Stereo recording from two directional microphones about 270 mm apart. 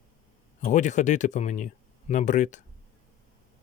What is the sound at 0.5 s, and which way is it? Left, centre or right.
Speech, left.